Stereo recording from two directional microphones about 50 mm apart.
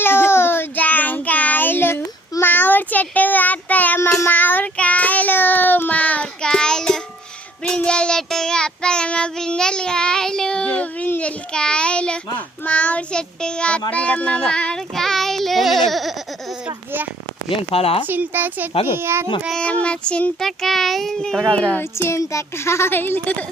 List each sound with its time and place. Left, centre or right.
0.0 s child singing: left
0.8 s child singing: left
6.4 s child singing: centre
11.2 s a sound: left
12.6 s a child's voice: left
14.8 s child singing: centre
18.0 s a woman's voice: right
18.9 s speech: right
19.5 s speech: left
20.4 s a child's voice: centre
21.5 s speech: left
22.1 s speech: left
23.2 s speech: left